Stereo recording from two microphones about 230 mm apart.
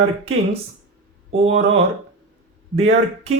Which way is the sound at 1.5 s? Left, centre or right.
Right.